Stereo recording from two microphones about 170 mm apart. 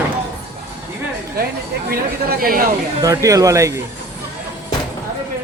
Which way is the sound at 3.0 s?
20° right (ahead or behind).